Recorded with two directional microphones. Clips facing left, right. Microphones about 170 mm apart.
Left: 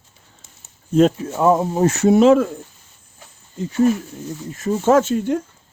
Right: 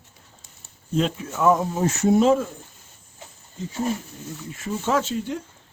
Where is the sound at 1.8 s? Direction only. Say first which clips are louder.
Left 5 dB; 70° left (ahead or behind).